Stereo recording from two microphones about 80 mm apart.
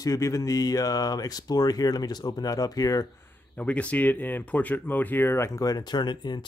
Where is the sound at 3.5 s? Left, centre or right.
Centre.